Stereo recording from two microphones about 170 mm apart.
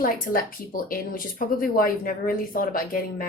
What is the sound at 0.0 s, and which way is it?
A woman's voice, 55° left (ahead or behind).